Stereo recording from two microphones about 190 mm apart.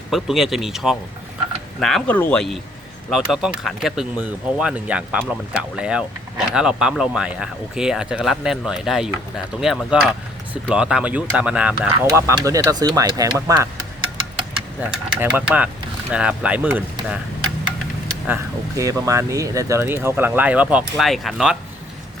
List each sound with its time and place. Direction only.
0.1 s speech: centre (ahead or behind); by 13.7 s 20° right (ahead or behind)
14.8 s speech: 10° right (ahead or behind)
18.8 s speech: 15° right (ahead or behind)